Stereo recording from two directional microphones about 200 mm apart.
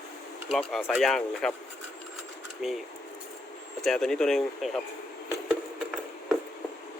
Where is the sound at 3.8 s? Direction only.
Centre (ahead or behind).